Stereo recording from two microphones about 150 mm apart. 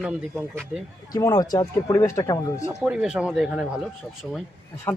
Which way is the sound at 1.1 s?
25° left (ahead or behind).